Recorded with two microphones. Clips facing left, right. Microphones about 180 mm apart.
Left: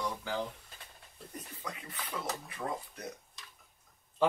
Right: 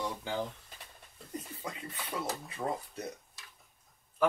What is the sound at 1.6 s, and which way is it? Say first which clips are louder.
Speech: even; 25° right (ahead or behind).